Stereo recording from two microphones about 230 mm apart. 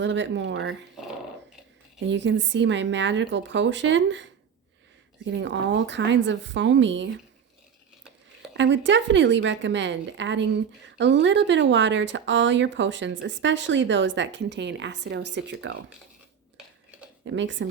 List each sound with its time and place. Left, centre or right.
0.0 s a woman's voice: right
2.0 s a woman's voice: right
8.5 s a woman's voice: right
17.2 s a woman's voice: right